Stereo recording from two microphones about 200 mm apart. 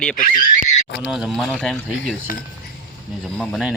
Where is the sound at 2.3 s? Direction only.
45° left (ahead or behind).